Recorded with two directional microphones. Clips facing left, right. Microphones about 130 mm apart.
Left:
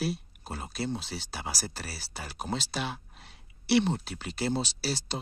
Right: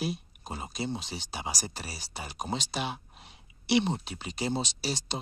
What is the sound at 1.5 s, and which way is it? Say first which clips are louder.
Speech: even; 15° right (ahead or behind).